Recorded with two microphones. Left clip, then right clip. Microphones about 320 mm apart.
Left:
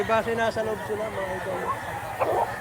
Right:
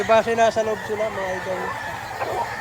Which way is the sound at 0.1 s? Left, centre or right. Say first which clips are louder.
Right 10 dB; centre.